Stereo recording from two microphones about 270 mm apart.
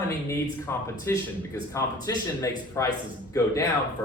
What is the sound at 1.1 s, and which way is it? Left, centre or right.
Speech, centre.